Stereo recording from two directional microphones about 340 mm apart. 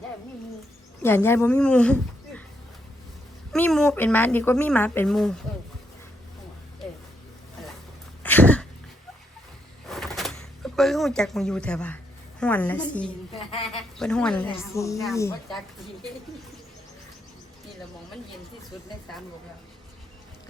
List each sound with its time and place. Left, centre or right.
1.0 s speech: centre
3.5 s a woman's voice: centre
8.2 s dog: centre
9.8 s a sound: centre
12.4 s a woman's voice: centre